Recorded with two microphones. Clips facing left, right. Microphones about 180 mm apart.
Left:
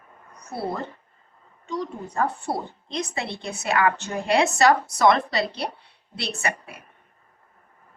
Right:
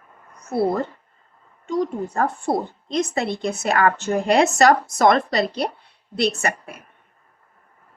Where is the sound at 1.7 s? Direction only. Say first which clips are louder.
Right 7 dB; 45° right (ahead or behind).